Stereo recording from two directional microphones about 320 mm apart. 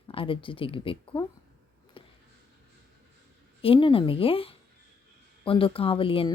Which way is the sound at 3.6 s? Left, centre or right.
Centre.